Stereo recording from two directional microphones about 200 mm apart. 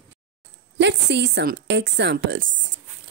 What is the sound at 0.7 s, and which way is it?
A woman's voice, 60° right (ahead or behind).